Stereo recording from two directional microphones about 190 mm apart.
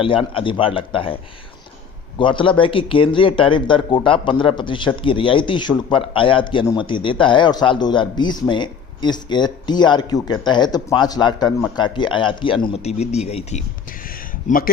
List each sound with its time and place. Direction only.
0.0 s speech: 30° left (ahead or behind)
2.1 s speech: 25° left (ahead or behind)
14.4 s speech: 45° left (ahead or behind)